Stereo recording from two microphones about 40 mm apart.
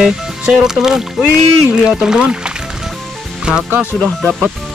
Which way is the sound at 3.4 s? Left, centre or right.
Centre.